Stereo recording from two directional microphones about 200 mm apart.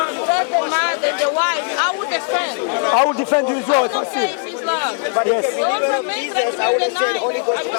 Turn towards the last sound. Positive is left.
turn(degrees=20)  # may be behind; listen again after turning